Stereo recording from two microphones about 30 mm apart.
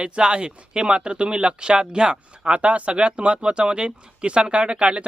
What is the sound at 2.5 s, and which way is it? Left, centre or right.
Speech, right.